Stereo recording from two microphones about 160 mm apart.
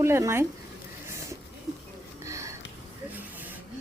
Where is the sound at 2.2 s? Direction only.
20° right (ahead or behind).